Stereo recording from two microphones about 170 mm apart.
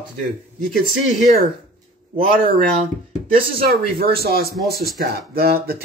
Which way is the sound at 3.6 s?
60° right (ahead or behind).